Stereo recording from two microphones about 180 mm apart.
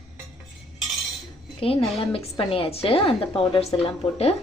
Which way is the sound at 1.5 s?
30° left (ahead or behind).